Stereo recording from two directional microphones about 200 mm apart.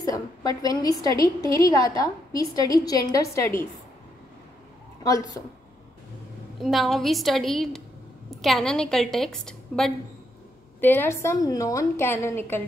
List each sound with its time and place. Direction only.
0.0 s a woman's voice: 15° left (ahead or behind)
5.4 s a woman's voice: 15° left (ahead or behind)
6.6 s a woman's voice: centre (ahead or behind)